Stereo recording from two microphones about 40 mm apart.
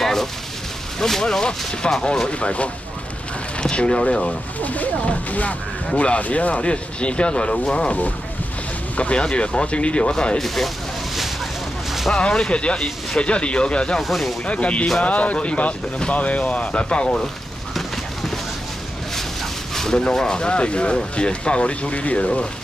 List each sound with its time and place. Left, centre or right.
0.0 s a sound: centre
0.9 s speech: centre
2.1 s speech: left
3.7 s speech: left
4.6 s speech: left
8.9 s speech: left
10.4 s speech: centre
12.1 s speech: left
14.0 s speech: centre
14.4 s speech: left
19.7 s speech: centre; by 22.5 s left